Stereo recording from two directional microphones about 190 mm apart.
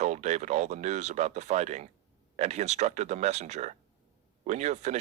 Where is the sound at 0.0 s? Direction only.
35° right (ahead or behind).